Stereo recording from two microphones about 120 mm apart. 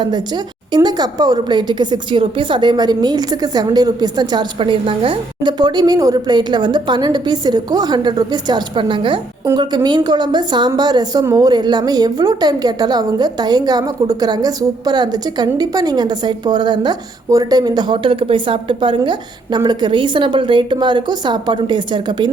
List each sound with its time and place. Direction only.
0.7 s a woman's voice: 35° right (ahead or behind)